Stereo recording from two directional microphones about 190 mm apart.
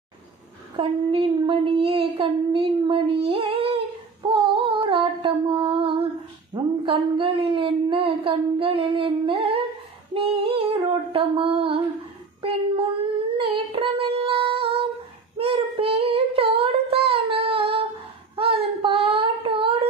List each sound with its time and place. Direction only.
0.7 s speech: 25° right (ahead or behind)
4.3 s music: 30° right (ahead or behind)
6.5 s speech: 30° right (ahead or behind)
12.4 s child singing: 30° right (ahead or behind)